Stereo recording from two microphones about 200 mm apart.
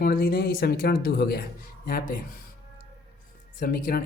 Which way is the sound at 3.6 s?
45° left (ahead or behind).